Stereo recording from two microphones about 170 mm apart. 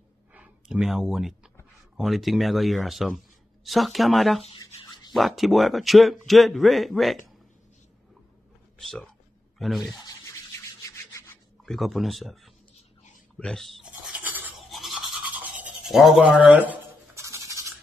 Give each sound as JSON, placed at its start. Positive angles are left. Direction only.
{"t": 0.3, "sound": "a sound", "side_deg": -5}
{"t": 2.0, "sound": "a man's voice", "side_deg": 0}
{"t": 4.6, "sound": "a sound", "side_deg": 30}
{"t": 5.1, "sound": "a man's voice", "side_deg": 0}
{"t": 8.7, "sound": "a man's voice", "side_deg": 5}
{"t": 11.6, "sound": "a man's voice", "side_deg": 0}
{"t": 13.4, "sound": "toothbrush", "side_deg": 5}